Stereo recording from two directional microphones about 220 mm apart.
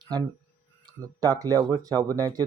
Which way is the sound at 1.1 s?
15° right (ahead or behind).